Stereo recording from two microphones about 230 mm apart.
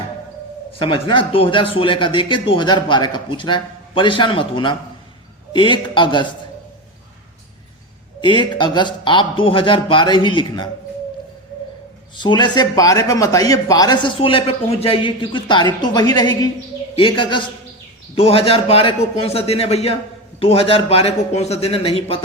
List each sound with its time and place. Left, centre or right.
0.7 s speech: left
8.2 s speech: centre
12.1 s speech: centre